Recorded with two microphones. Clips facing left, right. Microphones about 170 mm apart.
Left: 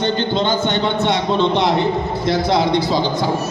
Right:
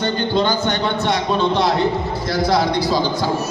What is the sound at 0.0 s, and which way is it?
A man's voice, 25° left (ahead or behind).